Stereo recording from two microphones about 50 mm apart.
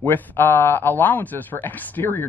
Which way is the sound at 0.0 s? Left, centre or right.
Left.